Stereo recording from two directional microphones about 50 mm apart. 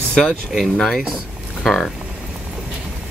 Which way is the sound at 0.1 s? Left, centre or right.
Centre.